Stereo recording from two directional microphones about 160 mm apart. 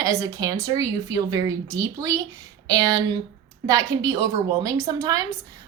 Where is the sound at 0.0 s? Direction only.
20° right (ahead or behind).